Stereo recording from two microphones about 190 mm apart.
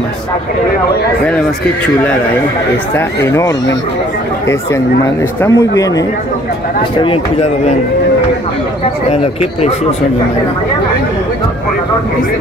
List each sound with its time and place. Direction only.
2.9 s speech: 10° left (ahead or behind)
7.0 s speech: 30° left (ahead or behind)
9.1 s speech: 30° left (ahead or behind)